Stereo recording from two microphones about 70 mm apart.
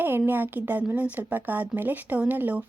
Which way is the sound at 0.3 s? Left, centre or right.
Right.